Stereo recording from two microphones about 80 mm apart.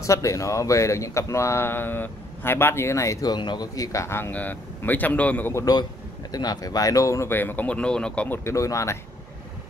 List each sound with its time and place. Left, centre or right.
0.0 s speech: left
3.3 s speech: left; by 5.5 s centre
6.3 s speech: left; by 8.3 s centre
8.3 s speech: left